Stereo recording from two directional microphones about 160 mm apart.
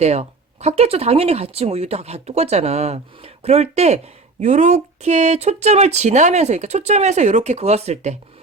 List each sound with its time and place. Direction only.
0.0 s speech: 40° right (ahead or behind)